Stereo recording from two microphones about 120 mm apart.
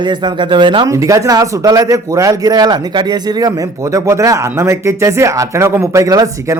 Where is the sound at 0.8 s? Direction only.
30° right (ahead or behind).